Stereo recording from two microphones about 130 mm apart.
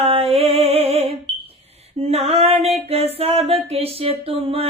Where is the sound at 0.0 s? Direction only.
50° right (ahead or behind).